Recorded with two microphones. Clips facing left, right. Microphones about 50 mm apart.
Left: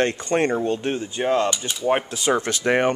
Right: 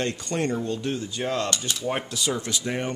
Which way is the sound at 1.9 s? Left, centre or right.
Left.